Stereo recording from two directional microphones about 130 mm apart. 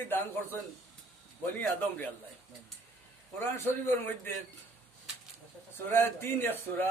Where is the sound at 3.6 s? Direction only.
15° left (ahead or behind).